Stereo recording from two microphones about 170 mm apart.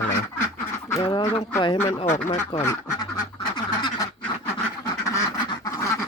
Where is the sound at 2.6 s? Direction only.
20° left (ahead or behind).